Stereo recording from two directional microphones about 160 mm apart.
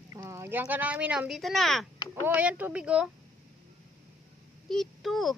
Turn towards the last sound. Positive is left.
turn(degrees=0)  # may be behind; listen again after turning